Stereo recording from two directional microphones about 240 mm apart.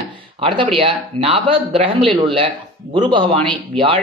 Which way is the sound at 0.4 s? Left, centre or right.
Right.